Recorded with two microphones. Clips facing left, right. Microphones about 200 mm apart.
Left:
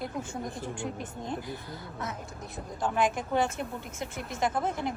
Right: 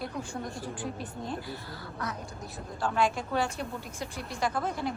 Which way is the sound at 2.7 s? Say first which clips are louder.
Even; 15° left (ahead or behind).